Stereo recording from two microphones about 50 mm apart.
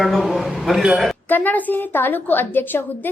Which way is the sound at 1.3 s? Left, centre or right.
Left.